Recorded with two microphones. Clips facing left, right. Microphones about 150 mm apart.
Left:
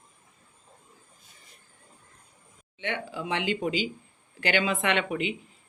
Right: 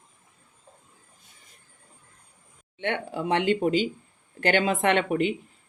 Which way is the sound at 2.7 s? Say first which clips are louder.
Right 4 dB; 55° right (ahead or behind).